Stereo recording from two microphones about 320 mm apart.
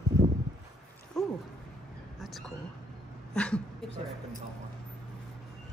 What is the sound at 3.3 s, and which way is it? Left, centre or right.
Speech, centre.